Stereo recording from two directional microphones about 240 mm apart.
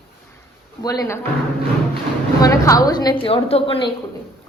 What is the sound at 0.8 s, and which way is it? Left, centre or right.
Speech, centre.